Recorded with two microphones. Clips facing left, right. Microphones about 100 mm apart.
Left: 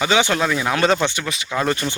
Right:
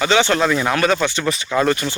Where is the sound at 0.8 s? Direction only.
25° left (ahead or behind).